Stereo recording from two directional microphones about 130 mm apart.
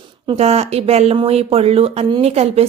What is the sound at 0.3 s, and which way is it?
A woman's voice, 55° right (ahead or behind).